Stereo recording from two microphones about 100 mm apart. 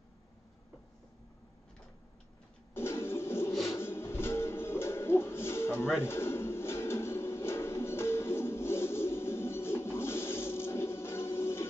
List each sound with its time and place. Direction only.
2.7 s a sound: 25° left (ahead or behind)
3.7 s music: 25° left (ahead or behind)
5.9 s pigeon: 25° left (ahead or behind)